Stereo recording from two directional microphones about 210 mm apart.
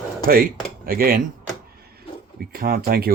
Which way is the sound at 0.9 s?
45° right (ahead or behind).